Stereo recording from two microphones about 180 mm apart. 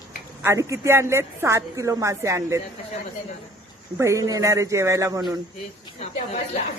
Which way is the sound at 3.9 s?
15° right (ahead or behind).